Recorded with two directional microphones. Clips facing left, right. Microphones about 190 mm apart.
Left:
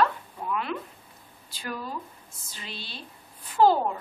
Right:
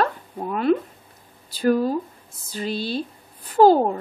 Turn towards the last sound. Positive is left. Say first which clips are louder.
# right 6 dB
turn(degrees=-40)  # may be behind; listen again after turning